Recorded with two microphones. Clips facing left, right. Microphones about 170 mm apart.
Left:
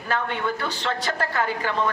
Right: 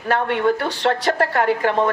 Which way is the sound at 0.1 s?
65° right (ahead or behind).